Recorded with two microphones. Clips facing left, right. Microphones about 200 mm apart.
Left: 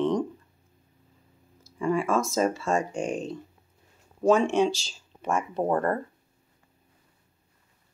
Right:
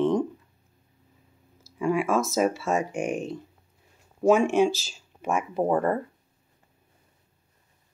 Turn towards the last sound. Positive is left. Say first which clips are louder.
# right 2 dB
turn(degrees=-10)  # may be behind; listen again after turning